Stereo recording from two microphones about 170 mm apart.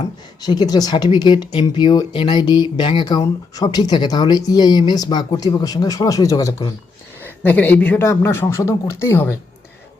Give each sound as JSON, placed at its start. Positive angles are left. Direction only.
{"t": 0.4, "sound": "speech", "side_deg": 25}
{"t": 7.4, "sound": "speech", "side_deg": 10}